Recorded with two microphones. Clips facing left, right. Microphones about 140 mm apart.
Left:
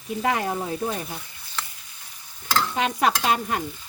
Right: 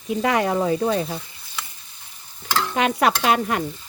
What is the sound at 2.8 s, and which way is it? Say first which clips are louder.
Stir: right 5 dB; 70° right (ahead or behind).